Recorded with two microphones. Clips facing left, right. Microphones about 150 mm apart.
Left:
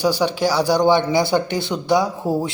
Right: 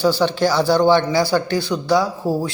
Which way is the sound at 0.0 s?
15° left (ahead or behind).